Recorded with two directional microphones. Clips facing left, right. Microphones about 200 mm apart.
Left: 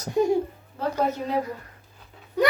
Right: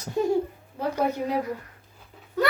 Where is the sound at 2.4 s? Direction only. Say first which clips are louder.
Left 1 dB; 15° left (ahead or behind).